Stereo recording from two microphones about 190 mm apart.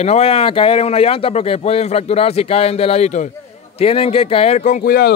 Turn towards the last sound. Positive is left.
turn(degrees=50)  # may be behind; listen again after turning